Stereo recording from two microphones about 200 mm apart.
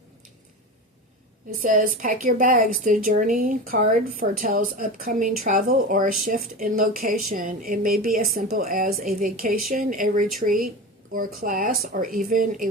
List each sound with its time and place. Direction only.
1.6 s a woman's voice: 45° right (ahead or behind)